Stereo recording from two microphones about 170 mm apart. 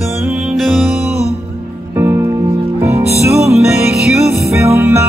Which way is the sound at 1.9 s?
15° right (ahead or behind).